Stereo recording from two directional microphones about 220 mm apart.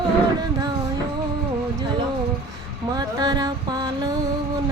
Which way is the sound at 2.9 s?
20° right (ahead or behind).